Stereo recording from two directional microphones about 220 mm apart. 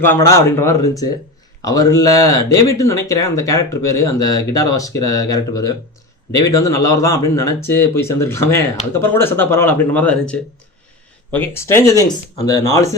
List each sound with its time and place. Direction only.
0.1 s speech: 15° left (ahead or behind)